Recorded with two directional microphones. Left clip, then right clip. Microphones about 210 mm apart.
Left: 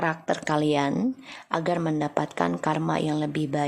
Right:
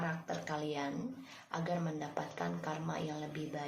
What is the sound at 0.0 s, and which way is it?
A woman's voice, 55° left (ahead or behind).